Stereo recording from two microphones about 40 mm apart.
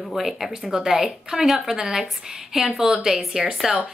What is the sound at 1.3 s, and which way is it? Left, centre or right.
A woman's voice, centre.